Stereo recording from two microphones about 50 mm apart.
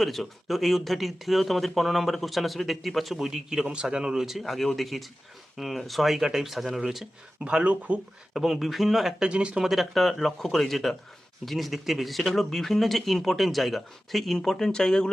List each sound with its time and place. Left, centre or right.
0.0 s speech: centre
3.2 s a man's voice: centre
7.3 s speech: right
8.3 s speech: centre
9.1 s speech: centre
9.6 s speech: centre